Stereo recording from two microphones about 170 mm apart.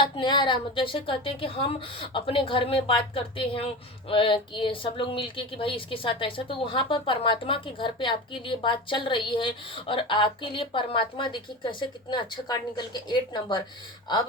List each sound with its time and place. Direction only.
0.0 s a woman's voice: 30° left (ahead or behind)